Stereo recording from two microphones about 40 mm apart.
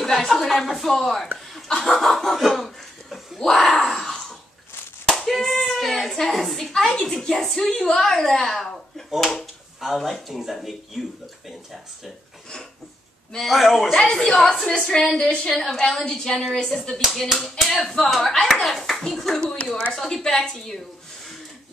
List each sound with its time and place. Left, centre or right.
0.3 s speech: centre
2.5 s a sound: centre
5.0 s clapping: centre
5.3 s a sound: centre
6.6 s a woman's voice: centre
13.4 s speech: centre
14.0 s a woman's voice: centre
15.5 s speech: centre
16.1 s a woman's voice: centre